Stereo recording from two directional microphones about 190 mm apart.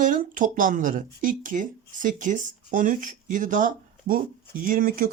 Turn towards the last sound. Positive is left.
turn(degrees=-45)  # may be behind; listen again after turning